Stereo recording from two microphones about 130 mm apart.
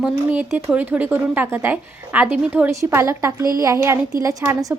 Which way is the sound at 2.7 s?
25° right (ahead or behind).